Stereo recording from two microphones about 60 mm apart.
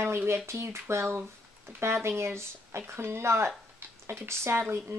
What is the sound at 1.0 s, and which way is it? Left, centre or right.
Speech, right.